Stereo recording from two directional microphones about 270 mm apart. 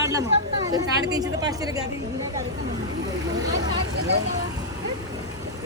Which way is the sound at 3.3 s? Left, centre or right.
Centre.